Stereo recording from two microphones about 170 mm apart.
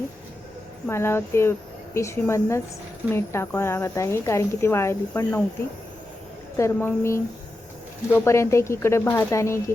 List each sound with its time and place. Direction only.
0.9 s speech: 15° left (ahead or behind)
6.6 s speech: 15° left (ahead or behind)